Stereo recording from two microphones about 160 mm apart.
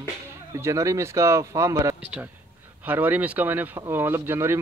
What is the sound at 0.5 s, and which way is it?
A man's voice, 20° right (ahead or behind).